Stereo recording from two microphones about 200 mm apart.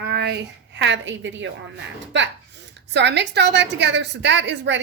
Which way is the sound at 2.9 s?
60° right (ahead or behind).